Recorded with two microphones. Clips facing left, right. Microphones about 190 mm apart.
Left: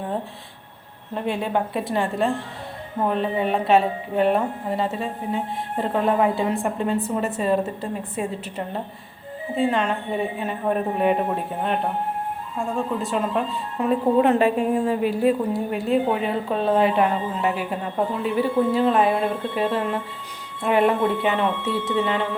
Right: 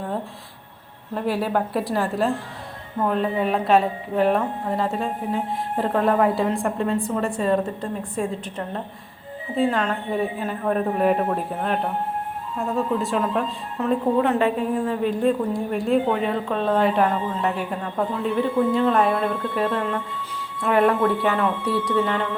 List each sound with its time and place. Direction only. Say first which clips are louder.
1.1 s a woman's voice: right 1 dB; 5° right (ahead or behind)
13.7 s a woman's voice: left 1 dB; 10° left (ahead or behind)
19.6 s speech: left 2 dB; 20° left (ahead or behind)
21.9 s a woman's voice: left 1 dB; 5° left (ahead or behind)